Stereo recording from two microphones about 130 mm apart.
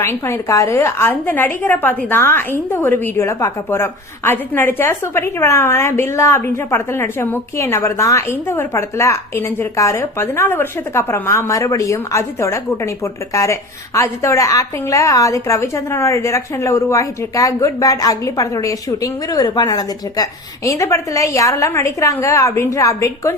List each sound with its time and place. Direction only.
0.0 s a woman's voice: 20° left (ahead or behind)